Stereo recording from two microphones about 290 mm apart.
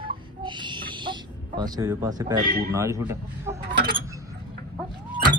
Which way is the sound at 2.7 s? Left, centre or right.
Centre.